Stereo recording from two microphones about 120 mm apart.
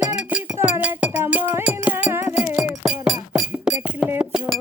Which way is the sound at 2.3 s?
5° right (ahead or behind).